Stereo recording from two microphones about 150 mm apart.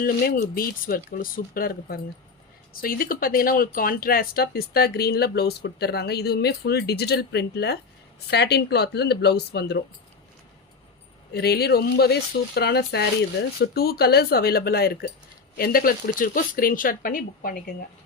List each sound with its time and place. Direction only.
0.0 s speech: 85° left
11.3 s speech: 90° left
15.5 s speech: 80° left